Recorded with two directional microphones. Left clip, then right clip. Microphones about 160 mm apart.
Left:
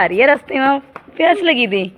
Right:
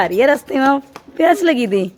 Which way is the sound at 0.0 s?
30° right (ahead or behind).